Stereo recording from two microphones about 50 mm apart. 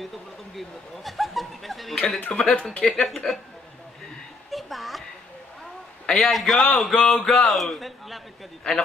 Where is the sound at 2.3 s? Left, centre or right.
Centre.